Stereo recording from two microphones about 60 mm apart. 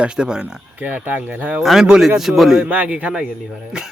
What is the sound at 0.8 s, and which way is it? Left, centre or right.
Speech, right.